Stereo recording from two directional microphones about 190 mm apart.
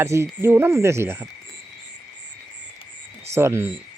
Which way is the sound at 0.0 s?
15° right (ahead or behind).